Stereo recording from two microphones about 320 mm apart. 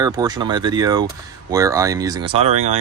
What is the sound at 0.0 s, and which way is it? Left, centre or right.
Speech, centre.